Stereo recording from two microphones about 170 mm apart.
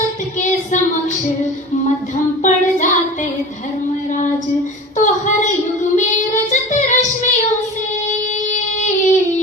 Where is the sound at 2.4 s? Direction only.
50° left (ahead or behind).